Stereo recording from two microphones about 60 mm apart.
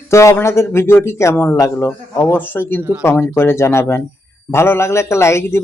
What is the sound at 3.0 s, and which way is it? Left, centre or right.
Speech, left.